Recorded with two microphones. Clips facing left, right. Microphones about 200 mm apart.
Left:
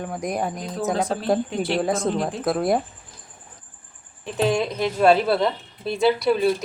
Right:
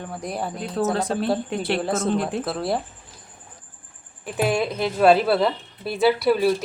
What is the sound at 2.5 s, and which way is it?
Speech, 20° left (ahead or behind).